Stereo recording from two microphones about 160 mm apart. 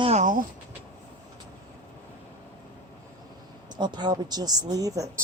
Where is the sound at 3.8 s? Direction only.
30° right (ahead or behind).